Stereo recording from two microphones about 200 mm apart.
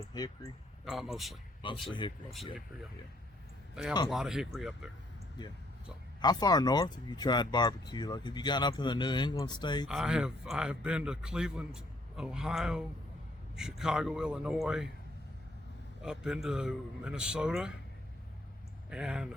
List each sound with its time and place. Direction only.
0.1 s speech: 20° left (ahead or behind)
0.9 s a man's voice: centre (ahead or behind)
1.9 s speech: 25° left (ahead or behind)
3.8 s a man's voice: 5° right (ahead or behind)
6.2 s speech: 20° left (ahead or behind)
9.9 s a man's voice: centre (ahead or behind)
16.0 s a man's voice: 5° right (ahead or behind)
18.9 s a man's voice: 5° right (ahead or behind)